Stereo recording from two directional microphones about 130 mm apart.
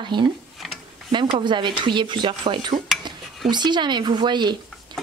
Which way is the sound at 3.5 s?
35° right (ahead or behind).